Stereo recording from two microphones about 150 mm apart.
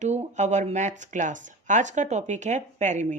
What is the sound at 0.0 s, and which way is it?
A woman's voice, 50° right (ahead or behind).